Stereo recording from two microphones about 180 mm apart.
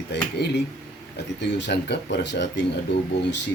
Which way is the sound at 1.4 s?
70° left (ahead or behind).